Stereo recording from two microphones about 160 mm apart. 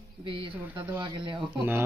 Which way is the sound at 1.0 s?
30° right (ahead or behind).